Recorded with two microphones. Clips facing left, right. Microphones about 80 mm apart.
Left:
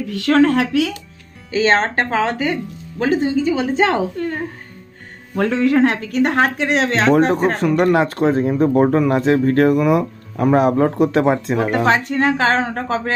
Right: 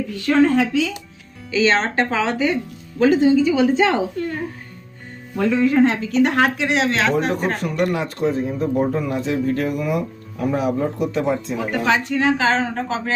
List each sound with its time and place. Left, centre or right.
0.1 s speech: left
1.5 s a woman's voice: left
5.4 s speech: left
8.2 s speech: left
9.3 s speech: left
10.8 s speech: left
11.7 s speech: left